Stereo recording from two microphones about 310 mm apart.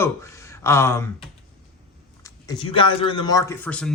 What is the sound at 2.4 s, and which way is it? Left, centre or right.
A man's voice, centre.